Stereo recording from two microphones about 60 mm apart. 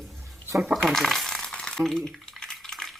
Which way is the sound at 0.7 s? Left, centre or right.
Centre.